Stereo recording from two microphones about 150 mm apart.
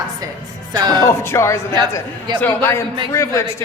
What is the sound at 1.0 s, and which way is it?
A man's voice, 20° left (ahead or behind).